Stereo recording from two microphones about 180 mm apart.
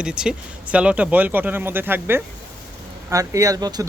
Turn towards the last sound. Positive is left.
turn(degrees=-20)  # may be behind; listen again after turning